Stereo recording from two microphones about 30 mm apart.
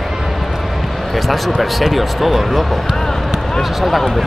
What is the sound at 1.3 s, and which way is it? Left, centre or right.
Speech, centre.